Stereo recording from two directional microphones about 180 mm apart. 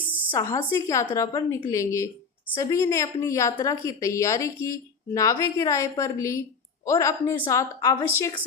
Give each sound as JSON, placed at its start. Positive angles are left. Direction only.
{"t": 0.3, "sound": "a woman's voice", "side_deg": 20}